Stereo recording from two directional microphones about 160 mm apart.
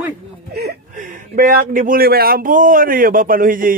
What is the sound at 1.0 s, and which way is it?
Speech, 55° right (ahead or behind).